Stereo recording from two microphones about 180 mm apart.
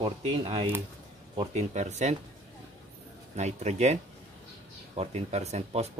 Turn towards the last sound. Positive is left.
turn(degrees=-35)  # may be behind; listen again after turning